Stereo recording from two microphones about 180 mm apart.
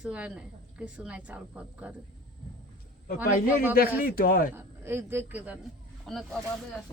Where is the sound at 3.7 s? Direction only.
55° left (ahead or behind).